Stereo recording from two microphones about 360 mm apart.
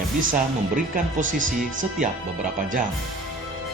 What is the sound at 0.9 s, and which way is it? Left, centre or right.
Speech, right.